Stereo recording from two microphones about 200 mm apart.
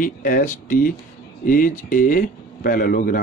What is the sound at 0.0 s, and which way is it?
Speech, 45° left (ahead or behind).